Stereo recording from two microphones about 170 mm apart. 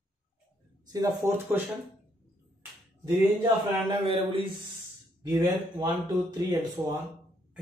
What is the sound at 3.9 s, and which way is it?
Speech, 30° right (ahead or behind).